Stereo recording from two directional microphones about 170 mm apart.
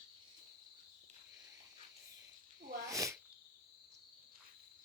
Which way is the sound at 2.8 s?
20° right (ahead or behind).